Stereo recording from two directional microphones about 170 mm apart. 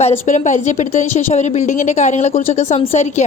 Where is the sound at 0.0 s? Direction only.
45° left (ahead or behind).